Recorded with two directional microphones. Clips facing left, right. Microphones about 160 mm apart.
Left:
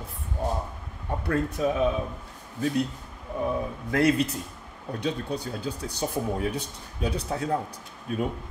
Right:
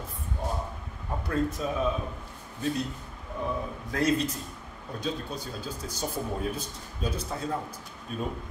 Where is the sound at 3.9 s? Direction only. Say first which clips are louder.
Left 4 dB; 65° left (ahead or behind).